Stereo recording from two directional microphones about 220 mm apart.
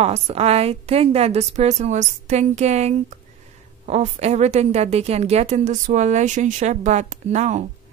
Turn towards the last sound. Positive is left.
turn(degrees=-30)  # may be behind; listen again after turning